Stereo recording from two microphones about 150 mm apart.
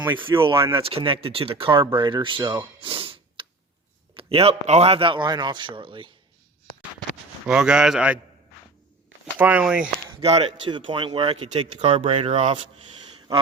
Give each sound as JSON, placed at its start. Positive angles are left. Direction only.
{"t": 0.5, "sound": "a man's voice", "side_deg": -20}
{"t": 0.8, "sound": "a man's voice", "side_deg": -40}
{"t": 2.8, "sound": "snort", "side_deg": -35}
{"t": 4.1, "sound": "a man's voice", "side_deg": -40}
{"t": 7.4, "sound": "a man's voice", "side_deg": -5}
{"t": 9.4, "sound": "a man's voice", "side_deg": -10}
{"t": 10.1, "sound": "speech", "side_deg": -40}